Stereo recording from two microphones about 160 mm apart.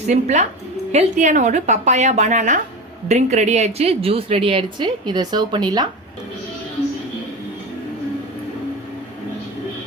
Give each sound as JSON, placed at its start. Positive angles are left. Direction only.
{"t": 0.1, "sound": "a woman's voice", "side_deg": -45}